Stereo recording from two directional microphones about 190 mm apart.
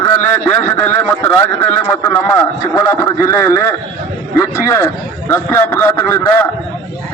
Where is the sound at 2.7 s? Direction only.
15° left (ahead or behind).